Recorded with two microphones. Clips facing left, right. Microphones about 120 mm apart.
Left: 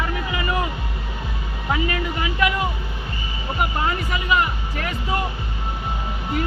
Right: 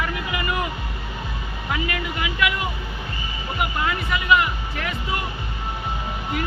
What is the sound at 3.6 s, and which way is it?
Speech, 35° left (ahead or behind).